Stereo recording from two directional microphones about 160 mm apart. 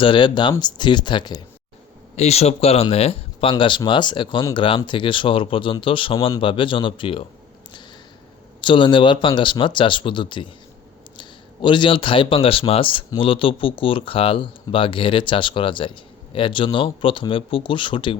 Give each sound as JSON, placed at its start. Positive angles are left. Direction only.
{"t": 0.0, "sound": "speech", "side_deg": 30}
{"t": 2.1, "sound": "speech", "side_deg": 40}
{"t": 8.6, "sound": "speech", "side_deg": 30}